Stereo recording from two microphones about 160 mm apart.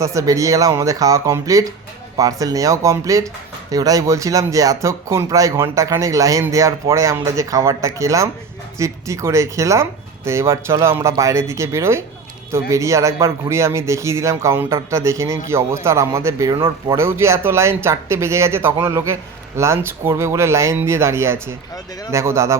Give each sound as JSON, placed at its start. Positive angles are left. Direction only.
{"t": 0.0, "sound": "speech", "side_deg": -20}